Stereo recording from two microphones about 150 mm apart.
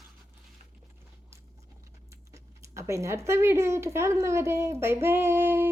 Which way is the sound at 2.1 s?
20° right (ahead or behind).